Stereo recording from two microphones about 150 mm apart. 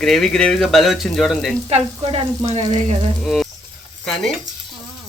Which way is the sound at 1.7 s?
45° right (ahead or behind).